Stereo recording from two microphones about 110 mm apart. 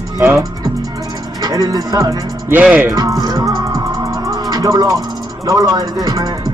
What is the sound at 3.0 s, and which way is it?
Music, 35° right (ahead or behind).